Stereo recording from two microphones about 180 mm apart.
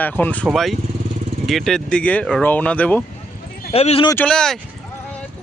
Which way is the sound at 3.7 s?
35° left (ahead or behind).